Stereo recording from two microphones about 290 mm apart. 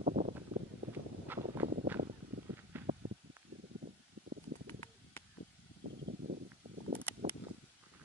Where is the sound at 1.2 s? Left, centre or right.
Centre.